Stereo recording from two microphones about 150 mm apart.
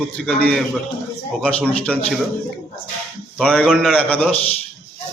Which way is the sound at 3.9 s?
10° left (ahead or behind).